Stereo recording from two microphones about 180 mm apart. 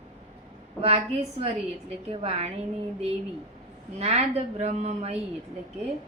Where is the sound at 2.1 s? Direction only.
35° right (ahead or behind).